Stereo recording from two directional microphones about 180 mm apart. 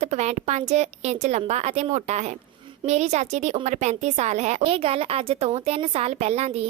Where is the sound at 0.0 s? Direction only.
40° right (ahead or behind).